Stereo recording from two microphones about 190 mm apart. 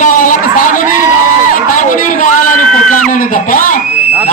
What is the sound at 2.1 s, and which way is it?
Crowd, 45° left (ahead or behind).